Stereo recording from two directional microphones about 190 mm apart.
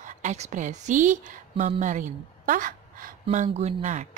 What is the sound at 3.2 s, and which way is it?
Speech, 35° right (ahead or behind).